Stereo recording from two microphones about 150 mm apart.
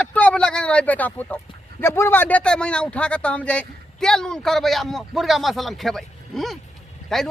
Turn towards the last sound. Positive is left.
turn(degrees=5)  # may be behind; listen again after turning